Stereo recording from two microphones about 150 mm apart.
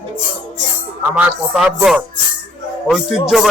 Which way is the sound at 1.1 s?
5° right (ahead or behind).